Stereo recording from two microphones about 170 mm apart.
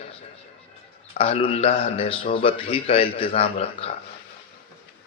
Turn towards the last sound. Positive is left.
turn(degrees=35)  # may be behind; listen again after turning